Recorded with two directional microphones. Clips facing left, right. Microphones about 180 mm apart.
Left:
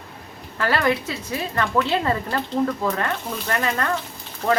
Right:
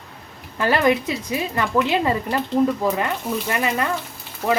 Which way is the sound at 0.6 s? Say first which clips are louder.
Right 3 dB; 20° right (ahead or behind).